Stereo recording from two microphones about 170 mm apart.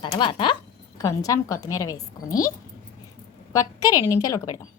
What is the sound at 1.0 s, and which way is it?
Speech, 20° left (ahead or behind).